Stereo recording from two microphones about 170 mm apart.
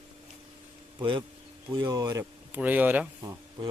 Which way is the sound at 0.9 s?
30° right (ahead or behind).